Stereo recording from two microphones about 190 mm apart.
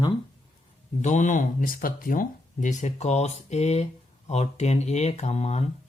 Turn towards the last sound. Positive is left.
turn(degrees=35)  # may be behind; listen again after turning